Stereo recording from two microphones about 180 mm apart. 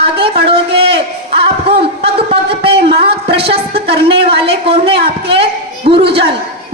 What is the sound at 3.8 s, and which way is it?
A woman's voice, 30° right (ahead or behind).